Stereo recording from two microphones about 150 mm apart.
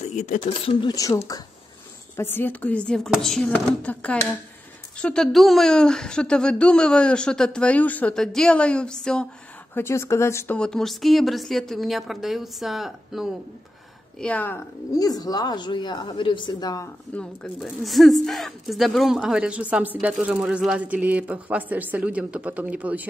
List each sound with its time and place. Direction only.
0.1 s speech: 55° left (ahead or behind)
0.5 s a woman's voice: 30° left (ahead or behind); by 9.3 s 5° left (ahead or behind)
9.8 s speech: 15° left (ahead or behind)
10.6 s a woman's voice: 5° left (ahead or behind)
14.2 s speech: 10° left (ahead or behind)
14.9 s speech: 25° left (ahead or behind)
17.1 s speech: 5° left (ahead or behind); by 23.0 s 10° right (ahead or behind)